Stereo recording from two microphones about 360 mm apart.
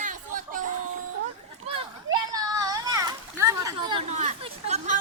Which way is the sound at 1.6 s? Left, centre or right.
Centre.